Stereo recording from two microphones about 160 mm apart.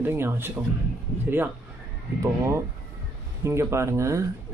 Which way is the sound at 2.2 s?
15° right (ahead or behind).